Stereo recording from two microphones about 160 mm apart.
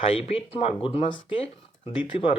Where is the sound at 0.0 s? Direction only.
40° left (ahead or behind).